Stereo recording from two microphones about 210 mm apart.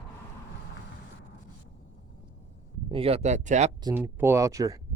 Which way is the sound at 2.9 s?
30° right (ahead or behind).